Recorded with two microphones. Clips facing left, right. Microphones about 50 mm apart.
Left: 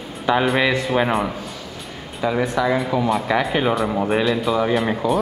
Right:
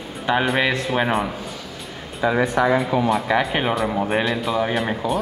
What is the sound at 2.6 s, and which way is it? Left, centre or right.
Speech, right.